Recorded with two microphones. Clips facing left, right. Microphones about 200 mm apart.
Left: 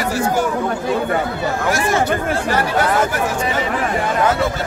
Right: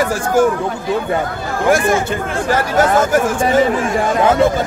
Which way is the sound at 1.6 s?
50° right (ahead or behind).